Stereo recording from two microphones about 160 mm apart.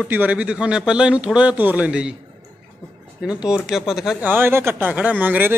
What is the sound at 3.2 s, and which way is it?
Speech, 5° right (ahead or behind).